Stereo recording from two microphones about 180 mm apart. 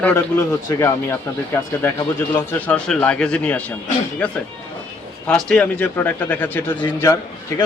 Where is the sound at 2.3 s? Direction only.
10° left (ahead or behind).